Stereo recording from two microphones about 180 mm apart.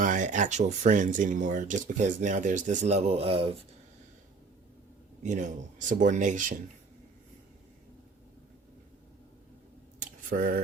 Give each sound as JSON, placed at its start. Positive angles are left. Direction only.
{"t": 0.0, "sound": "speech", "side_deg": -45}
{"t": 5.2, "sound": "speech", "side_deg": -40}
{"t": 10.0, "sound": "a sound", "side_deg": -50}